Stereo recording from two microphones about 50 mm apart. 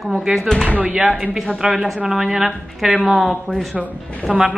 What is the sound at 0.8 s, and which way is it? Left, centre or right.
Speech, right.